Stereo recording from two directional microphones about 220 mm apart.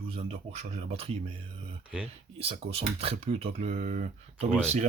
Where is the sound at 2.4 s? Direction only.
25° right (ahead or behind).